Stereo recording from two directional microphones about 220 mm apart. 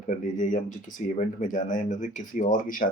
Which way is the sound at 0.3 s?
35° left (ahead or behind).